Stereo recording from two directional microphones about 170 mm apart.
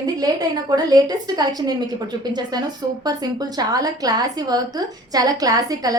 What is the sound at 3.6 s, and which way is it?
A woman's voice, 20° right (ahead or behind).